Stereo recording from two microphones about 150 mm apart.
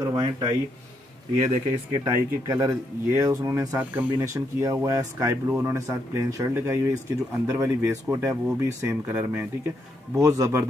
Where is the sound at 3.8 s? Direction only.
10° right (ahead or behind).